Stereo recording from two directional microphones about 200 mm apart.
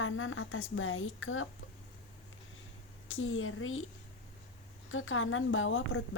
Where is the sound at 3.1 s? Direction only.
90° left.